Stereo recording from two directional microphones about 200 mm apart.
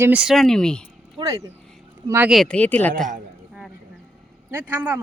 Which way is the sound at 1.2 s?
15° right (ahead or behind).